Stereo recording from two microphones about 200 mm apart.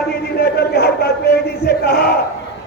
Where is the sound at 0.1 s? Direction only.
50° left (ahead or behind).